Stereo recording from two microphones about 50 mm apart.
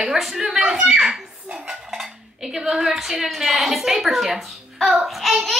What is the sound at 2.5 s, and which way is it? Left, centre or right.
A woman's voice, centre.